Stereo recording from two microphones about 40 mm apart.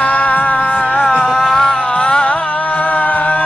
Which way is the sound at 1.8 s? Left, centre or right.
Left.